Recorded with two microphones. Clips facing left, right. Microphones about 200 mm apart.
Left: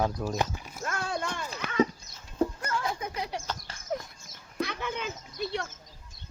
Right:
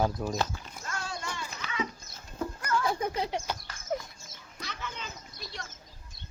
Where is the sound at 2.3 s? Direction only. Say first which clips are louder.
Left 2 dB; 30° left (ahead or behind).